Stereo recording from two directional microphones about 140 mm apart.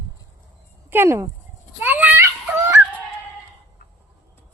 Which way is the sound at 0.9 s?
15° right (ahead or behind).